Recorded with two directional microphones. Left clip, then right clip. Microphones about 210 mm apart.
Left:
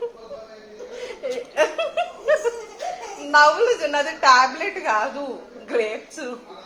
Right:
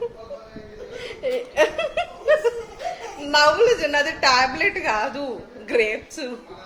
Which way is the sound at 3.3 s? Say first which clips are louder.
Left 1 dB; 30° right (ahead or behind).